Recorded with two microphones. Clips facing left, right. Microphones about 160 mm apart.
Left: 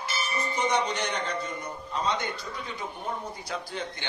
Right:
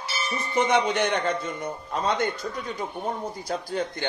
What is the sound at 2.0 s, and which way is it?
Speech, 50° right (ahead or behind).